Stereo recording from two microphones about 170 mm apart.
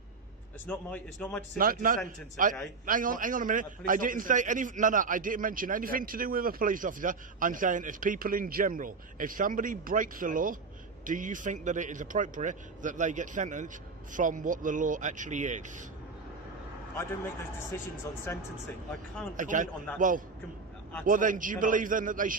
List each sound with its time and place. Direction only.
0.7 s a man's voice: 10° left (ahead or behind)
1.5 s a man's voice: 55° right (ahead or behind)
17.0 s a man's voice: 15° left (ahead or behind)
19.4 s a man's voice: 50° right (ahead or behind)